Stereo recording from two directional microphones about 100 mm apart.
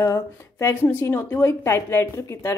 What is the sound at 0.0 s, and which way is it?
A woman's voice, 25° left (ahead or behind).